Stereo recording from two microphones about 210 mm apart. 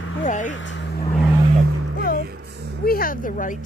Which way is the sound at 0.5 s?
60° left (ahead or behind).